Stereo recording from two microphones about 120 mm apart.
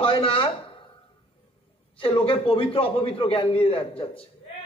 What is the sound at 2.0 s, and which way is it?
A man's voice, 45° left (ahead or behind).